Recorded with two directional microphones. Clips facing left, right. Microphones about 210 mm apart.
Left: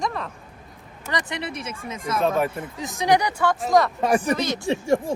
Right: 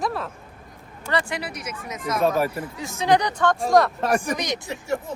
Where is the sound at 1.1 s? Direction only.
20° left (ahead or behind).